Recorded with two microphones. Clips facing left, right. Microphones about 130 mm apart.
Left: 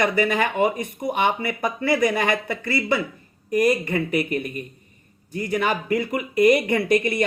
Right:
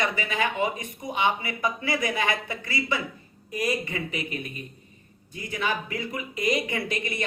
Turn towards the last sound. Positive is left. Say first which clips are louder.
# left 10 dB
turn(degrees=50)  # may be behind; listen again after turning